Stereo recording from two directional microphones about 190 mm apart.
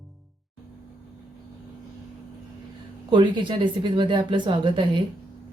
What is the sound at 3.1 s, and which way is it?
Speech, 25° right (ahead or behind).